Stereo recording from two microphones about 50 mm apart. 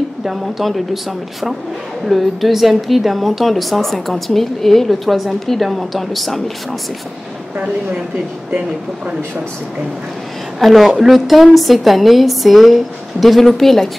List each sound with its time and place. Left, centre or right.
0.2 s a woman's voice: centre
2.0 s a woman's voice: centre
8.5 s speech: right
10.6 s a woman's voice: centre